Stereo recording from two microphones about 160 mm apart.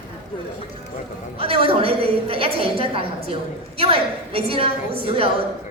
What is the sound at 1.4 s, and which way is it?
A woman's voice, 35° right (ahead or behind).